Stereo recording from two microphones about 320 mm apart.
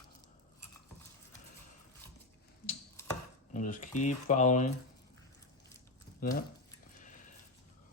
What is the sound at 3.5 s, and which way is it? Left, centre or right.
Speech, left.